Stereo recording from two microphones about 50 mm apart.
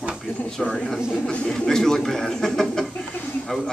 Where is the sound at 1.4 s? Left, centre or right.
Centre.